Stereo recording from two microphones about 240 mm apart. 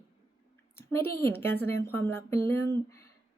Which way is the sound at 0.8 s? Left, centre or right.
Centre.